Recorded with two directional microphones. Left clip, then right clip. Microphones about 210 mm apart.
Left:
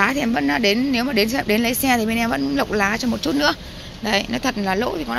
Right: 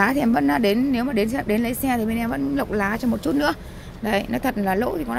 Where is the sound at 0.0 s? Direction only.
25° right (ahead or behind).